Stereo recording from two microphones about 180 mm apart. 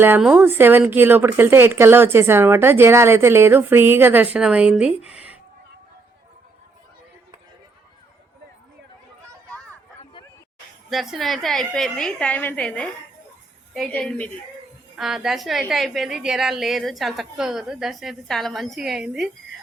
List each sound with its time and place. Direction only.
0.0 s speech: 10° right (ahead or behind)
5.0 s a sound: 5° right (ahead or behind)
10.8 s a woman's voice: centre (ahead or behind)